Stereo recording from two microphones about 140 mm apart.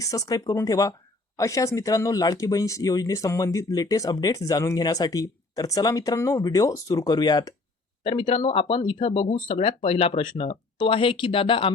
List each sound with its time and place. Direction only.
0.0 s speech: 25° left (ahead or behind)